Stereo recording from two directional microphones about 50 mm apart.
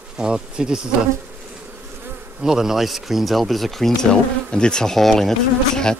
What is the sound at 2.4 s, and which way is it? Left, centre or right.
Speech, centre.